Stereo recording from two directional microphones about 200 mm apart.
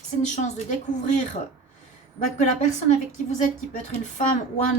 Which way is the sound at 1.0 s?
35° left (ahead or behind).